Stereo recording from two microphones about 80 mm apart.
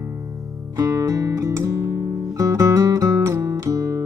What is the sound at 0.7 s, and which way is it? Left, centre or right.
Music, right.